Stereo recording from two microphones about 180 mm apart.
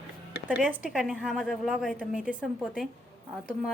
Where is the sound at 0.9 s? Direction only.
5° right (ahead or behind).